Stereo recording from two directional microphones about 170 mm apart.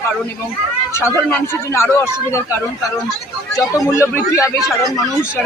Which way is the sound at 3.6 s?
15° left (ahead or behind).